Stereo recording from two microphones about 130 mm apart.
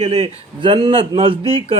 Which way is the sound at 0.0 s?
50° right (ahead or behind).